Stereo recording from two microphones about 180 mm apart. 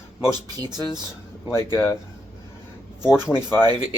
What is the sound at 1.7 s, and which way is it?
Speech, 15° left (ahead or behind).